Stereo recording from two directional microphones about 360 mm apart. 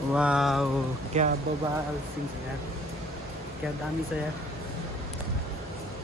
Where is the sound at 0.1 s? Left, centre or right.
Centre.